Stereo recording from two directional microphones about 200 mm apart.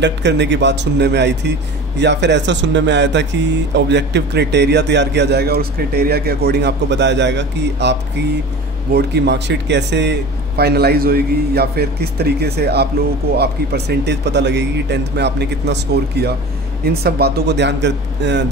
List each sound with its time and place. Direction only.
0.0 s a man's voice: 60° right (ahead or behind)